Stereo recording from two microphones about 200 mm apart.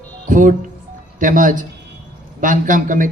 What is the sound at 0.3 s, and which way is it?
A man's voice, 40° right (ahead or behind).